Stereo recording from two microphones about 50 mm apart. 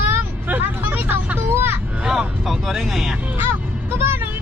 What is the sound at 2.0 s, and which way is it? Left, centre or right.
Speech, centre.